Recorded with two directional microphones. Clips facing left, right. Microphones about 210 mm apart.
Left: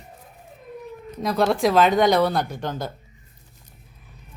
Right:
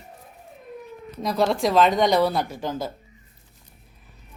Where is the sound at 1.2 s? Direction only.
Centre (ahead or behind).